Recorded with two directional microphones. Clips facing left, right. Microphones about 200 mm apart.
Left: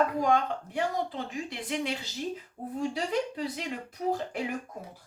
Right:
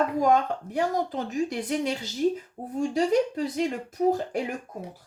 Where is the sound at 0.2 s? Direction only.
45° right (ahead or behind).